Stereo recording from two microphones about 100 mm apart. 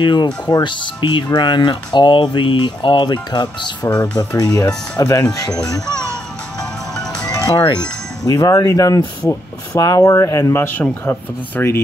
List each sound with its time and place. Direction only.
0.0 s speech: 50° left (ahead or behind)
3.9 s speech: 15° left (ahead or behind)
4.2 s speech: 35° left (ahead or behind)
7.0 s music: 10° left (ahead or behind)
7.2 s speech: 40° left (ahead or behind); by 11.8 s 25° left (ahead or behind)